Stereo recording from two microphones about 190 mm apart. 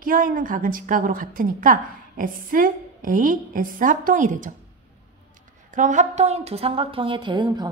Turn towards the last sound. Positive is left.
turn(degrees=-25)  # may be behind; listen again after turning